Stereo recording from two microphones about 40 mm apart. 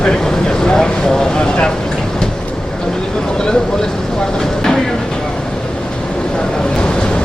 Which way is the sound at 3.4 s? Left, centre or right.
Left.